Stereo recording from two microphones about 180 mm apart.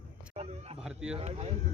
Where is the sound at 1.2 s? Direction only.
35° right (ahead or behind).